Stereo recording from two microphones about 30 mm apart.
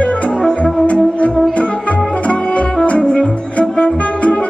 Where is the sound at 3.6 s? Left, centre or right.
Left.